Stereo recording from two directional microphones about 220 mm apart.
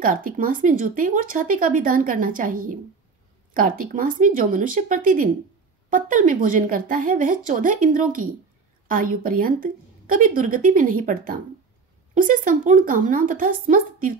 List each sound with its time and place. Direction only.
0.0 s speech: 40° right (ahead or behind)